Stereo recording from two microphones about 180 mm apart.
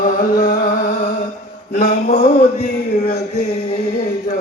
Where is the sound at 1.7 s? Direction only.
55° left (ahead or behind).